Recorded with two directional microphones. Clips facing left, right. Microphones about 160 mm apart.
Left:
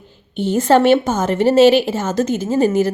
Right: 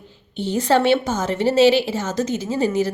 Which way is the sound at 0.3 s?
50° left (ahead or behind).